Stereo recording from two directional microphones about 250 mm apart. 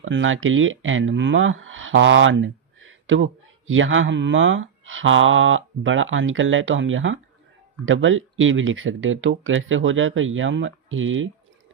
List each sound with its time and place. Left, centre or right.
0.0 s speech: right